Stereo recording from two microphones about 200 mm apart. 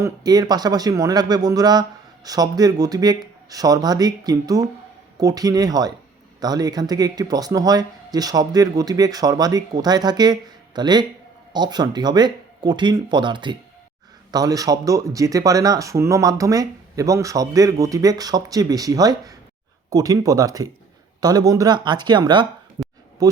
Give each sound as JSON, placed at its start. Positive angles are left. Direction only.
{"t": 0.0, "sound": "speech", "side_deg": -20}
{"t": 22.8, "sound": "a sound", "side_deg": -20}
{"t": 23.2, "sound": "speech", "side_deg": -20}